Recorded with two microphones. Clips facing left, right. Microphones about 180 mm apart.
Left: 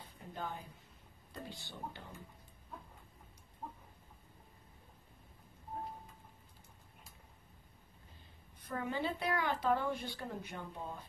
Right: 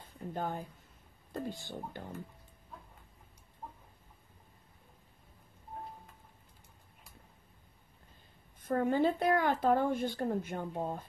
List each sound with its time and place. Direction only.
0.0 s a sound: 45° right (ahead or behind)
1.3 s a woman's voice: 45° right (ahead or behind)
8.5 s a woman's voice: 50° right (ahead or behind)